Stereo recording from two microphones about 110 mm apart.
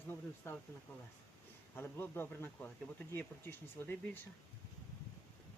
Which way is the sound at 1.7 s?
20° left (ahead or behind).